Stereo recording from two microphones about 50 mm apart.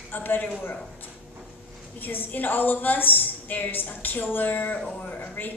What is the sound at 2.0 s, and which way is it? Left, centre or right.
A woman's voice, left.